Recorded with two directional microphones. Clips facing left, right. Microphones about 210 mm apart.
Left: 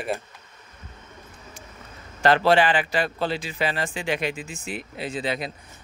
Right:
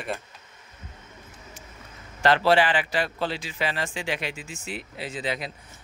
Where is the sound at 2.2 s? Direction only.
45° left (ahead or behind).